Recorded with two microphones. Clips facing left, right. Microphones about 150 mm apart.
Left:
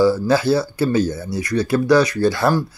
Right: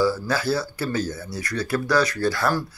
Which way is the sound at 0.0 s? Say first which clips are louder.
Left 7 dB; 25° left (ahead or behind).